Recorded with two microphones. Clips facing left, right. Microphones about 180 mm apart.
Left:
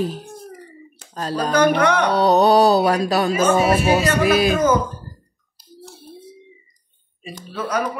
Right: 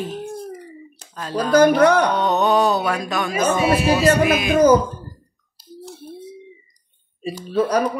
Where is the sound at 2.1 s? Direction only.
35° left (ahead or behind).